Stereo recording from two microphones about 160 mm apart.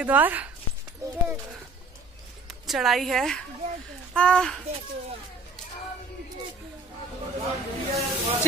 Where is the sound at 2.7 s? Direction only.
Centre (ahead or behind).